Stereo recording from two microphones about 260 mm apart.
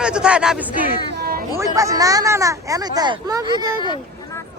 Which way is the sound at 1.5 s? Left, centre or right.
Centre.